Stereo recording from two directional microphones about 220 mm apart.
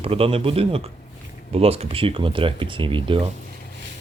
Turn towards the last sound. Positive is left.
turn(degrees=-25)  # may be behind; listen again after turning